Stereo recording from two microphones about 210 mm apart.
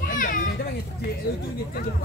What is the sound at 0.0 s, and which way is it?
Children playing, 40° left (ahead or behind).